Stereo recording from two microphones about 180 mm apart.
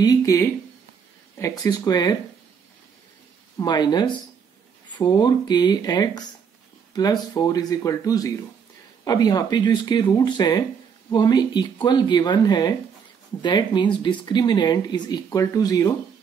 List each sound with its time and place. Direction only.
0.0 s speech: 20° left (ahead or behind)
3.5 s speech: 25° left (ahead or behind)